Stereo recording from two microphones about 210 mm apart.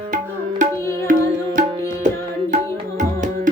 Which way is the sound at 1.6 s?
35° right (ahead or behind).